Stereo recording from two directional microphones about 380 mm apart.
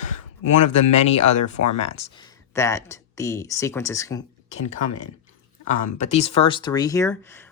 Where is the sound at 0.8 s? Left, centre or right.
Centre.